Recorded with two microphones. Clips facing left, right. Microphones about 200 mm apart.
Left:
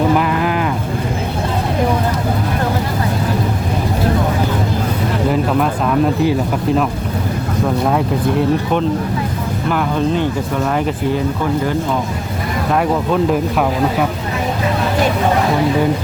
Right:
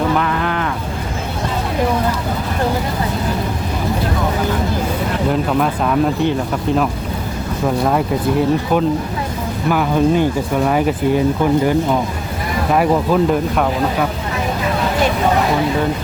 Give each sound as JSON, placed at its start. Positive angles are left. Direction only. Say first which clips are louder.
{"t": 9.6, "sound": "speech", "louder": "right 3 dB", "side_deg": -5}
{"t": 12.7, "sound": "speech", "louder": "right 2 dB", "side_deg": -5}